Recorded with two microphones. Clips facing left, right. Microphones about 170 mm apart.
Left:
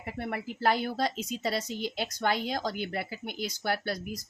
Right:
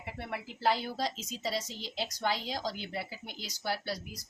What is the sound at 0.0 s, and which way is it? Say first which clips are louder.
Speech: left 5 dB; 50° left (ahead or behind).